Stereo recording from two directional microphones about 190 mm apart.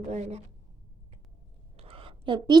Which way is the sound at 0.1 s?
35° right (ahead or behind).